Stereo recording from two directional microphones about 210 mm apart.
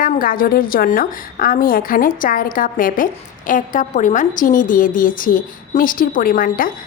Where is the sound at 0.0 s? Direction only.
40° left (ahead or behind).